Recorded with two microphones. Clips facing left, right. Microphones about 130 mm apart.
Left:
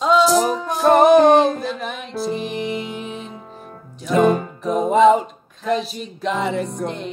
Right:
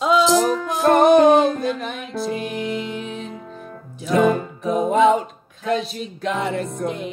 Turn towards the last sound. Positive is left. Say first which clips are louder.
# even
turn(degrees=-5)  # may be behind; listen again after turning